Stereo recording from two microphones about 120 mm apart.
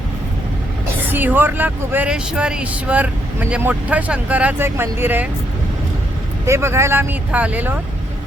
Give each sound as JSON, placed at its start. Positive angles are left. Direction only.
{"t": 1.1, "sound": "speech", "side_deg": -15}
{"t": 6.4, "sound": "speech", "side_deg": -20}